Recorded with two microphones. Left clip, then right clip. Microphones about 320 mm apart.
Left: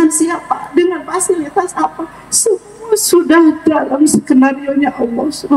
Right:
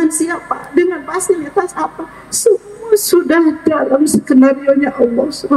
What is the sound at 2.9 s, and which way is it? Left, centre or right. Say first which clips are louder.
A woman's voice: left 1 dB; centre.